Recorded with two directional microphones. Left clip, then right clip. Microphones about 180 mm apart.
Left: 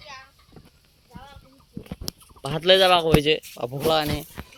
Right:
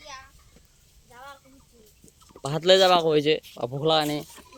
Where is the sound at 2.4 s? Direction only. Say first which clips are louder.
Left 1 dB; 5° right (ahead or behind).